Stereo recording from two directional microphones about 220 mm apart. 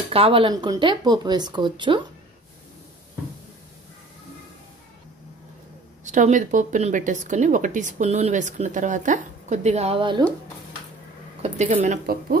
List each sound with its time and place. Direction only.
0.1 s a woman's voice: 25° right (ahead or behind)
6.0 s speech: 35° right (ahead or behind)
11.4 s speech: 30° right (ahead or behind)